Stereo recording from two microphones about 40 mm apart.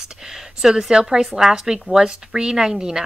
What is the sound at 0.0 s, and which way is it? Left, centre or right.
A woman's voice, centre.